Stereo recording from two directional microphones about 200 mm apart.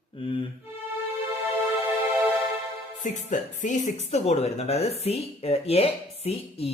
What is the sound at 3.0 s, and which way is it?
Speech, 40° left (ahead or behind).